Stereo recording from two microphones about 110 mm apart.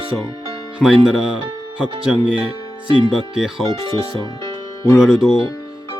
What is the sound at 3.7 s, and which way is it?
Speech, 50° right (ahead or behind).